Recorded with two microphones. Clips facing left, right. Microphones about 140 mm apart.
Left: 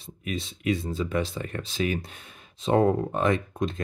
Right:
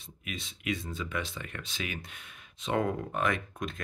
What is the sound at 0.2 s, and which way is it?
Speech, 35° left (ahead or behind).